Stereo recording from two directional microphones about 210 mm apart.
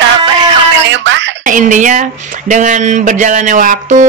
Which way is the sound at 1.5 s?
40° right (ahead or behind).